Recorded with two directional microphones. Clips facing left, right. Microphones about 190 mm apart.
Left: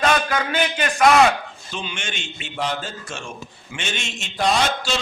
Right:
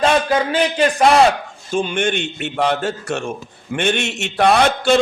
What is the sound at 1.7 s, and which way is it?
A man's voice, 50° right (ahead or behind).